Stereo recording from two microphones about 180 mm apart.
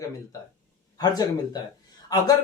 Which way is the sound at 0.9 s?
20° left (ahead or behind).